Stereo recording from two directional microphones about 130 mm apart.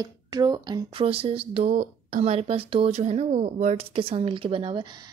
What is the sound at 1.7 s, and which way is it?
Speech, 90° right.